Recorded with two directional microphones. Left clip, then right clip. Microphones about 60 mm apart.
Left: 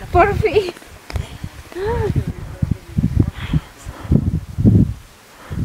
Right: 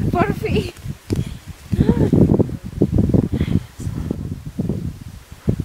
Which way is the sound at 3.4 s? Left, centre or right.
Right.